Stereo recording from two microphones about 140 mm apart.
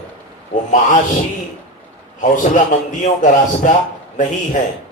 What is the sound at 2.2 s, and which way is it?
A man's voice, 65° left (ahead or behind).